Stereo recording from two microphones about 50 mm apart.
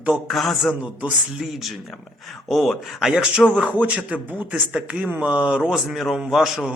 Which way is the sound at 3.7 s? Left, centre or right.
Right.